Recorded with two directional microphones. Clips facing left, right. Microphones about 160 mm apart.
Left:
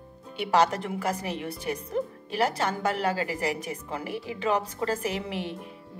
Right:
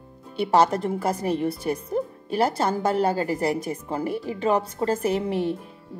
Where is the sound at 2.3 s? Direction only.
35° right (ahead or behind).